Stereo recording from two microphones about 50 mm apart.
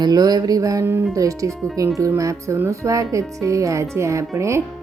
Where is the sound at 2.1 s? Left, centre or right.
Right.